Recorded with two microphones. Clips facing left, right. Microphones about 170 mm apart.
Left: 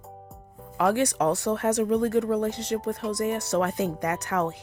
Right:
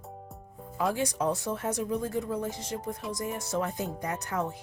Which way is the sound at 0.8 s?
75° left (ahead or behind).